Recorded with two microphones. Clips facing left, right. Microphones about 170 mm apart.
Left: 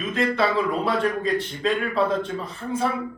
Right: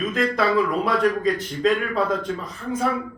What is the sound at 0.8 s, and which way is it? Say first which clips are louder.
A man's voice: right 2 dB; 30° left (ahead or behind).